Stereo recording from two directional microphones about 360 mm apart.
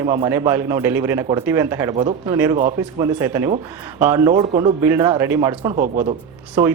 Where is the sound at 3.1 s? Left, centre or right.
Centre.